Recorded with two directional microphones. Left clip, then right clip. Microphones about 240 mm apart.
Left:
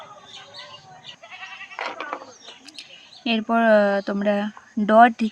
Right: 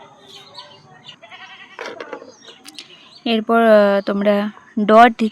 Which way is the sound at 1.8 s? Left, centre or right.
Centre.